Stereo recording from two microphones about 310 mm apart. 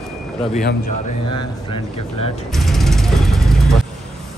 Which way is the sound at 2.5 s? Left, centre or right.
Centre.